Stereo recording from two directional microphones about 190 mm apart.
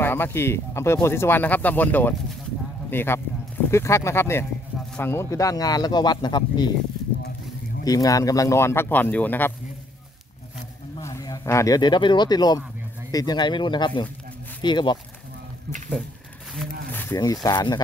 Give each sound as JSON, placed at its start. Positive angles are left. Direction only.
{"t": 0.0, "sound": "speech", "side_deg": 10}
{"t": 7.8, "sound": "speech", "side_deg": 20}
{"t": 11.0, "sound": "speech", "side_deg": 15}
{"t": 16.9, "sound": "speech", "side_deg": 15}